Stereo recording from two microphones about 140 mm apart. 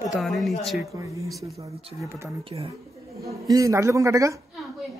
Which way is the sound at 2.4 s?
40° right (ahead or behind).